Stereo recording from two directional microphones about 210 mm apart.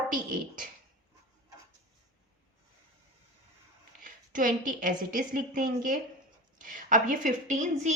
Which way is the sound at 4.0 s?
40° right (ahead or behind).